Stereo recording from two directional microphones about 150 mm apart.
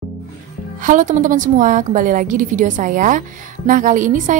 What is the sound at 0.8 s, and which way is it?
A woman's voice, 60° right (ahead or behind).